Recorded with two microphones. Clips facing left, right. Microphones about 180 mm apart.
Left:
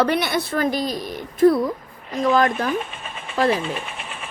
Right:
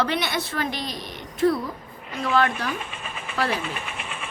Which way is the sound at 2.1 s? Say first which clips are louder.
Left 4 dB; 40° left (ahead or behind).